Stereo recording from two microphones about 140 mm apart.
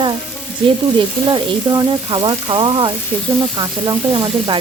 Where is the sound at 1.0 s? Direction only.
30° right (ahead or behind).